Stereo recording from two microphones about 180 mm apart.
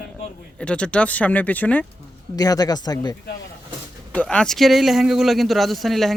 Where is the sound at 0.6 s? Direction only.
5° left (ahead or behind).